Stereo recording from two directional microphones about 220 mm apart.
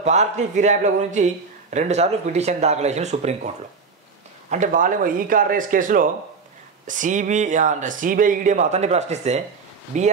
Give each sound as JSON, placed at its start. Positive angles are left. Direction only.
{"t": 0.0, "sound": "speech", "side_deg": -30}
{"t": 4.5, "sound": "speech", "side_deg": -35}